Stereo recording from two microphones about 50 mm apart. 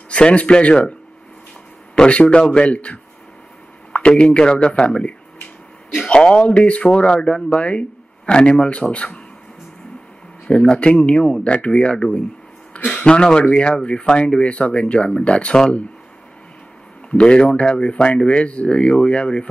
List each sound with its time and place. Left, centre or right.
0.1 s speech: left
2.0 s speech: centre
7.2 s speech: centre
10.8 s speech: left
17.1 s speech: left